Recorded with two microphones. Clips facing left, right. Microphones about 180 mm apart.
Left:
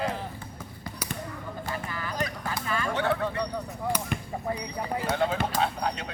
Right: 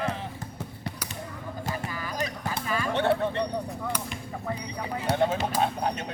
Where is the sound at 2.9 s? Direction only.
25° right (ahead or behind).